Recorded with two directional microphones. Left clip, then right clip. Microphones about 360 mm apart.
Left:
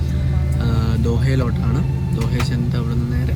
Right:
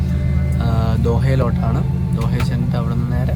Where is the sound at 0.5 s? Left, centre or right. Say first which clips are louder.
Right 2 dB; centre.